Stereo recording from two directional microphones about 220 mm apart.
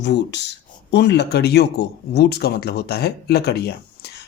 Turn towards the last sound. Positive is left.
turn(degrees=45)  # may be behind; listen again after turning